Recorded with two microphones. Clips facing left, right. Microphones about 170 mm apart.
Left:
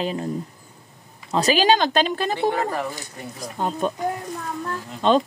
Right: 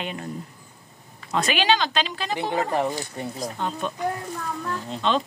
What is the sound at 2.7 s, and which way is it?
Speech, 25° right (ahead or behind).